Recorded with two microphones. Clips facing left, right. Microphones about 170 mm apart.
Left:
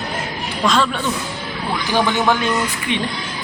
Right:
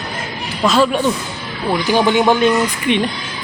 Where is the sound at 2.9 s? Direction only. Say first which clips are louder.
Right 7 dB; 65° right (ahead or behind).